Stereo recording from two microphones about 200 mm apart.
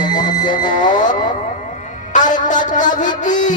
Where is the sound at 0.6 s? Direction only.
40° left (ahead or behind).